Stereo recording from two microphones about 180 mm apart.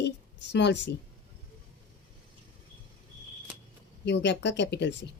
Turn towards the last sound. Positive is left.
turn(degrees=75)  # may be behind; listen again after turning